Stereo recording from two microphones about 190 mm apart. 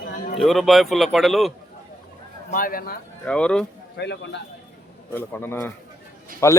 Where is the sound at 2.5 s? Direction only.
45° left (ahead or behind).